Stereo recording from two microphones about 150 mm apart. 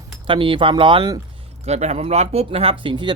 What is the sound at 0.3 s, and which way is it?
Speech, 35° right (ahead or behind).